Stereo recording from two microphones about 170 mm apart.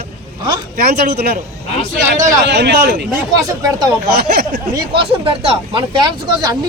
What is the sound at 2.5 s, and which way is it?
Speech, 80° right.